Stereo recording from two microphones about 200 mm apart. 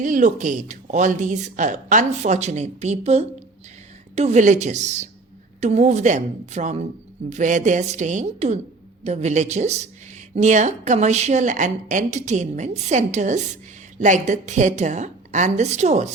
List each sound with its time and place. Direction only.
0.0 s speech: 40° right (ahead or behind)